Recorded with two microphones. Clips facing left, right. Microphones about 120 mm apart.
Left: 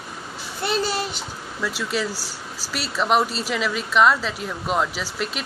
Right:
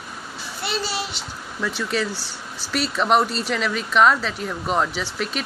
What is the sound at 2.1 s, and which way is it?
Speech, 40° left (ahead or behind).